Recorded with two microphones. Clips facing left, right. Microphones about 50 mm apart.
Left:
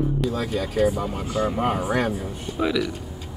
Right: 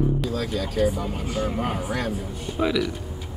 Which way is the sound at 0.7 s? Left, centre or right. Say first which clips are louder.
Left 2 dB; centre.